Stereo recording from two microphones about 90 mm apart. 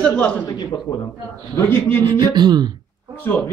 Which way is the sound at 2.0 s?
55° right (ahead or behind).